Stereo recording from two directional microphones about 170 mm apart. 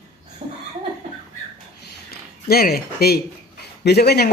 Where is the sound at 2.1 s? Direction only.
65° left (ahead or behind).